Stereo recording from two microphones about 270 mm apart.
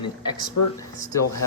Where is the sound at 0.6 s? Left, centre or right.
Left.